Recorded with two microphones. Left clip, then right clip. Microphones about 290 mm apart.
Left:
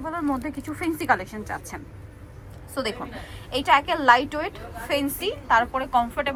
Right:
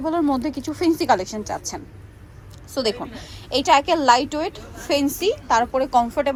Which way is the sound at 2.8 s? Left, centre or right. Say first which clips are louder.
Right 5 dB; centre.